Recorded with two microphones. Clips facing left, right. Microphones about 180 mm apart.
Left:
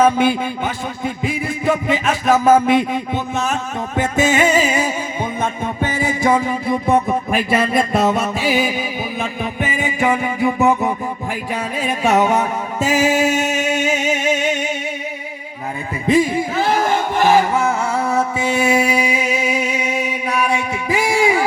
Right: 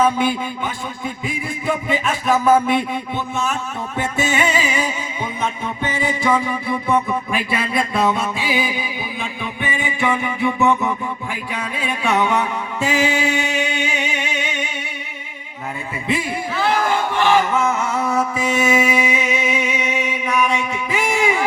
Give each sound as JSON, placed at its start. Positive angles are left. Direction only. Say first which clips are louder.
{"t": 0.0, "sound": "a man's voice", "louder": "left 3 dB", "side_deg": 45}
{"t": 3.9, "sound": "music", "louder": "left 5 dB", "side_deg": 45}
{"t": 17.2, "sound": "music", "louder": "left 3 dB", "side_deg": 40}